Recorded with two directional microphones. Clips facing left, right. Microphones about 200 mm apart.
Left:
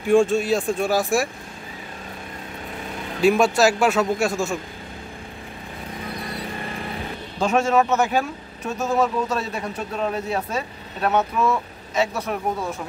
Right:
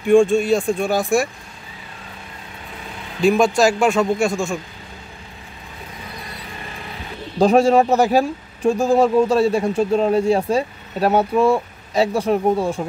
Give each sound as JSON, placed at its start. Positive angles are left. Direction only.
{"t": 0.1, "sound": "a man's voice", "side_deg": 5}
{"t": 3.2, "sound": "a man's voice", "side_deg": 5}
{"t": 7.3, "sound": "speech", "side_deg": -35}